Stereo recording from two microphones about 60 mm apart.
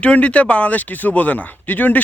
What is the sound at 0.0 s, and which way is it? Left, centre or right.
Speech, left.